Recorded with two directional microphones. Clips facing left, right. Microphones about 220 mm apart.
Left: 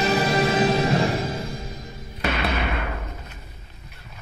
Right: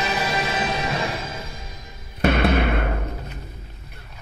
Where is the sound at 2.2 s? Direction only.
50° right (ahead or behind).